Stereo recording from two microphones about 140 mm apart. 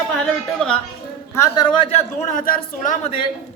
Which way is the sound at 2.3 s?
80° left.